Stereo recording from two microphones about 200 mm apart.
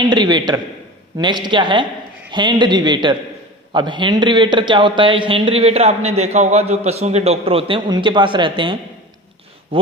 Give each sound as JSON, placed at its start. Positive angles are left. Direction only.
{"t": 0.1, "sound": "speech", "side_deg": -20}